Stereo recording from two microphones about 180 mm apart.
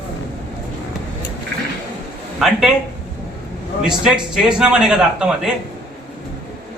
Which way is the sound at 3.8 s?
5° right (ahead or behind).